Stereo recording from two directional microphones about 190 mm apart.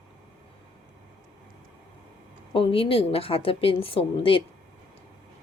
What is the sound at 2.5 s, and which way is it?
A woman's voice, 30° left (ahead or behind).